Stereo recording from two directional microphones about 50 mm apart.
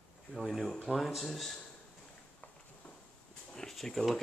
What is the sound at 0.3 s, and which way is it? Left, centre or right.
Speech, centre.